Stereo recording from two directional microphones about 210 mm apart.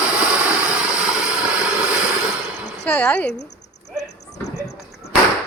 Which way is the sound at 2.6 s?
10° left (ahead or behind).